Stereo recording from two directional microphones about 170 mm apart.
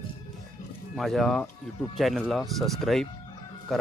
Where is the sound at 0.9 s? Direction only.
Centre (ahead or behind).